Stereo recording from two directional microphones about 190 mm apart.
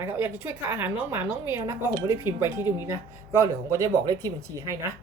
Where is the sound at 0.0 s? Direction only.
10° right (ahead or behind).